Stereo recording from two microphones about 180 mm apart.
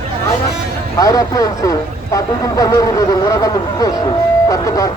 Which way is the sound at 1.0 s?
20° left (ahead or behind).